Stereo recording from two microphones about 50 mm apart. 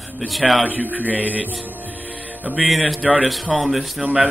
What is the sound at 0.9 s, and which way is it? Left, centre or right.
Speech, right.